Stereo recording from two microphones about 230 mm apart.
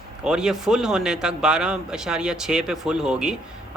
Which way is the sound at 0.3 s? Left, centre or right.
Centre.